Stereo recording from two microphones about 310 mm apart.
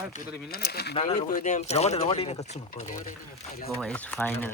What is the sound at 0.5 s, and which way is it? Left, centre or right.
Speech, left.